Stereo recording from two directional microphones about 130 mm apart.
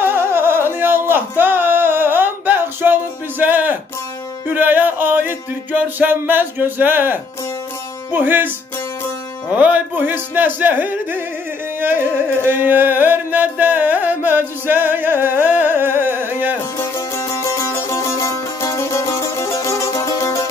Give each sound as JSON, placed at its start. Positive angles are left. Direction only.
{"t": 0.0, "sound": "music", "side_deg": -15}
{"t": 9.5, "sound": "music", "side_deg": -10}
{"t": 16.7, "sound": "music", "side_deg": 20}